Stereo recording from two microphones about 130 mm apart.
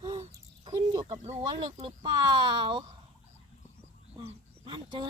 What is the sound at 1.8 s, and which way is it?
Speech, 35° right (ahead or behind).